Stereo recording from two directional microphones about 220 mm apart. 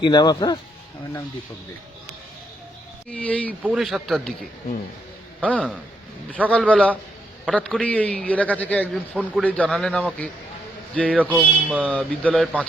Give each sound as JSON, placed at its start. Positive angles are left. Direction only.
{"t": 0.0, "sound": "speech", "side_deg": 20}
{"t": 3.1, "sound": "a man's voice", "side_deg": 5}
{"t": 5.4, "sound": "a man's voice", "side_deg": 5}
{"t": 11.2, "sound": "speech", "side_deg": -5}
{"t": 11.7, "sound": "a man's voice", "side_deg": 5}